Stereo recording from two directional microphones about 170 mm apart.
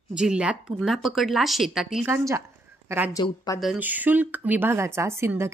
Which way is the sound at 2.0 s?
15° right (ahead or behind).